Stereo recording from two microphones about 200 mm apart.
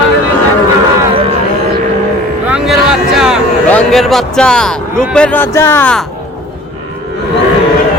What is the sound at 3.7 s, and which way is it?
A man's voice, 5° left (ahead or behind).